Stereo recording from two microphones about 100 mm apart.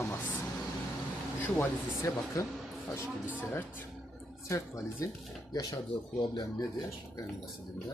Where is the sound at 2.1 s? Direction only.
25° left (ahead or behind).